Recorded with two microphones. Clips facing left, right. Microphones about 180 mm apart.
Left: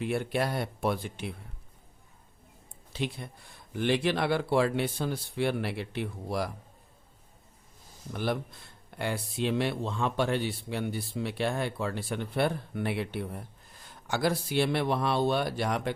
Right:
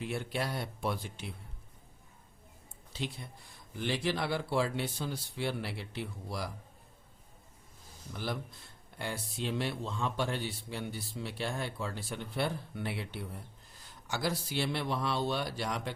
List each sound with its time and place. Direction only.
0.0 s speech: 55° left (ahead or behind)
2.9 s speech: 60° left (ahead or behind)
8.1 s speech: 60° left (ahead or behind)